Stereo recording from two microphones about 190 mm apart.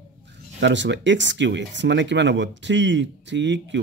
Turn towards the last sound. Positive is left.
turn(degrees=-70)  # may be behind; listen again after turning